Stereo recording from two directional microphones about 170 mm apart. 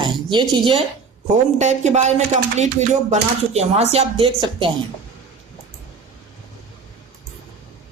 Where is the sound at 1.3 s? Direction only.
40° right (ahead or behind).